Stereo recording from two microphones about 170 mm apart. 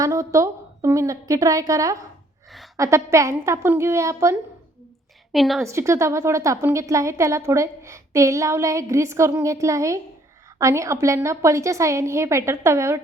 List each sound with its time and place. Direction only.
0.0 s a woman's voice: 20° right (ahead or behind)
5.3 s a woman's voice: centre (ahead or behind)
5.6 s a woman's voice: 15° right (ahead or behind)